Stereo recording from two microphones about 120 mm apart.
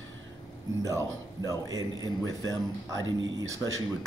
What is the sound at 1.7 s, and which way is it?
Speech, 30° right (ahead or behind).